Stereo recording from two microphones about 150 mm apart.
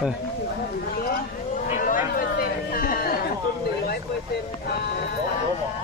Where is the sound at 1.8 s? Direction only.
70° left (ahead or behind).